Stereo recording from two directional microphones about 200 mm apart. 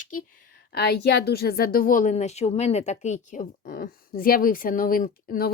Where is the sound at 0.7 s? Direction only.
55° left (ahead or behind).